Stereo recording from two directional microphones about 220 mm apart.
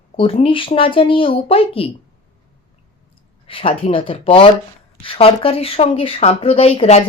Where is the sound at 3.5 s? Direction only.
25° left (ahead or behind).